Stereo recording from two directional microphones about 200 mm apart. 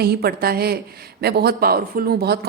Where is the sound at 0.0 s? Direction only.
50° right (ahead or behind).